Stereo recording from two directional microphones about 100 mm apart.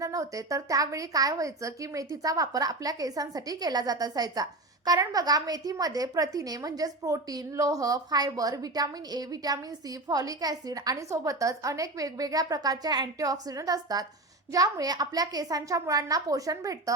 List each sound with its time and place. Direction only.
0.0 s a woman's voice: 35° right (ahead or behind)